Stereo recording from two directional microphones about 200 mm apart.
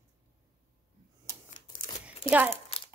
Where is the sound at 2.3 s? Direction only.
10° right (ahead or behind).